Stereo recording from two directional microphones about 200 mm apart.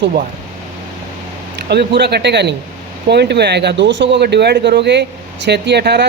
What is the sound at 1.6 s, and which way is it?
Speech, 55° right (ahead or behind).